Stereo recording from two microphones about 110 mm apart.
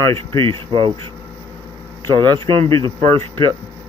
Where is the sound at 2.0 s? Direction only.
40° right (ahead or behind).